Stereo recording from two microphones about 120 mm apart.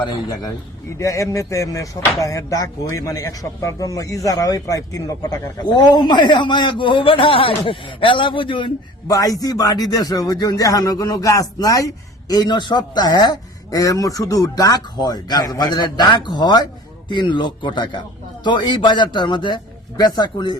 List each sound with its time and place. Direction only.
0.0 s speech: 30° left (ahead or behind)
9.0 s speech: 30° left (ahead or behind)